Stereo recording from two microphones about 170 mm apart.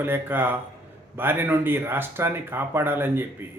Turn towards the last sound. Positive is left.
turn(degrees=-15)  # may be behind; listen again after turning